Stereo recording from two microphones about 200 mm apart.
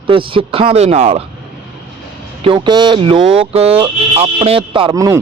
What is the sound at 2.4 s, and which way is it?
A man's voice, 25° right (ahead or behind).